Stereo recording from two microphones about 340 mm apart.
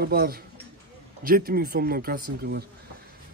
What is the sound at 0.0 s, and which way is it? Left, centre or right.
Speech, right.